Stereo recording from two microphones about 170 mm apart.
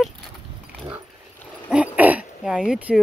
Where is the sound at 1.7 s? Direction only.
10° right (ahead or behind).